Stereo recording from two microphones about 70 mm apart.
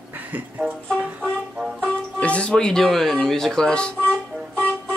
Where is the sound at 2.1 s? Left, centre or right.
Centre.